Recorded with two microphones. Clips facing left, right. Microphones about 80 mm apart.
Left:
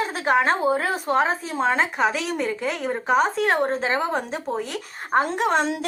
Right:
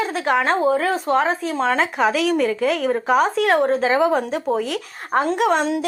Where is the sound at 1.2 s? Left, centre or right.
Right.